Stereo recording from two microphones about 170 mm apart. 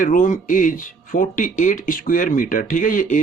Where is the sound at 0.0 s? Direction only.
50° left (ahead or behind).